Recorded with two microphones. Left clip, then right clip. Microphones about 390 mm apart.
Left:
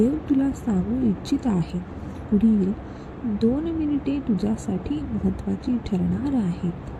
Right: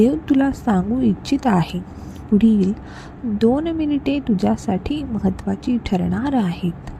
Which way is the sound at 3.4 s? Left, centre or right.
Centre.